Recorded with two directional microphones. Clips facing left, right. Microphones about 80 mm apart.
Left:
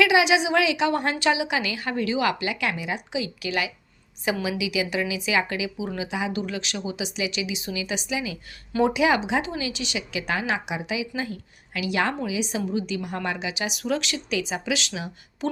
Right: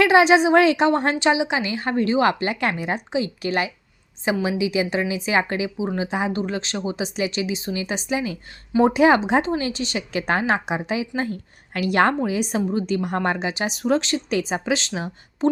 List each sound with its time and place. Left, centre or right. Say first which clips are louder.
0.0 s a woman's voice: right 5 dB; right
0.9 s a woman's voice: right 4 dB; right